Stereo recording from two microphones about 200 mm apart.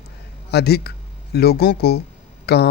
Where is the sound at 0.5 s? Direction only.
55° left (ahead or behind).